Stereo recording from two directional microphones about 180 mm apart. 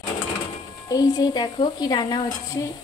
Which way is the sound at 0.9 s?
20° left (ahead or behind).